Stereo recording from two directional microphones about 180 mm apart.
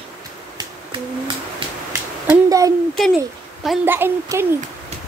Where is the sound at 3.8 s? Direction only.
10° right (ahead or behind).